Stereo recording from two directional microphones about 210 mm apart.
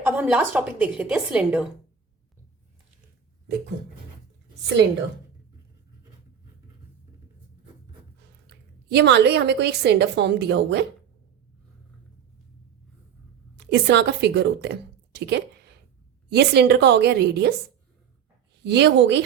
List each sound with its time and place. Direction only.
0.0 s a woman's voice: 5° right (ahead or behind)
8.4 s a woman's voice: 50° right (ahead or behind)
13.6 s speech: 55° right (ahead or behind)
18.6 s speech: 55° right (ahead or behind)